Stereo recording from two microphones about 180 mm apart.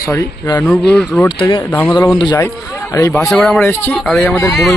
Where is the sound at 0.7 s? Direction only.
5° left (ahead or behind).